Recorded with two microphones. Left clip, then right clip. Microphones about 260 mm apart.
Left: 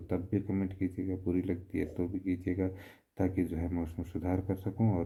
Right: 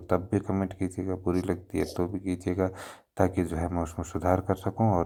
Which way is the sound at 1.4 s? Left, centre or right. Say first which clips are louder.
Right 6 dB; centre.